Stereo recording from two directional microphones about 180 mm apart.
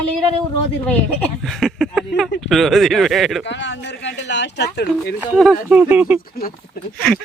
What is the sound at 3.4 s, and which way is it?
Speech, 80° left.